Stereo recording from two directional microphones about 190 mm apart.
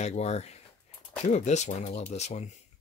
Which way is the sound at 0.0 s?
35° left (ahead or behind).